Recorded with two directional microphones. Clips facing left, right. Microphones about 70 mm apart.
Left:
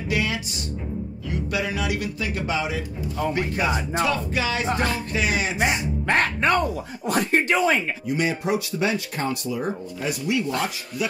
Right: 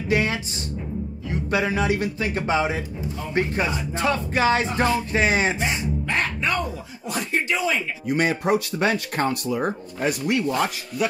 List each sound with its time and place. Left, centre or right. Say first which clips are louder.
0.1 s music: right 3 dB; right
1.3 s speech: right 4 dB; right
5.6 s speech: left 2 dB; left
8.1 s speech: right 3 dB; right